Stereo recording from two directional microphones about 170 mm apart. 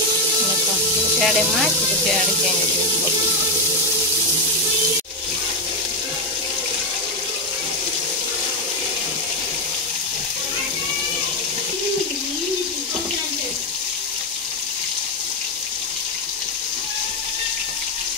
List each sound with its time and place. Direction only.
1.2 s speech: 5° left (ahead or behind)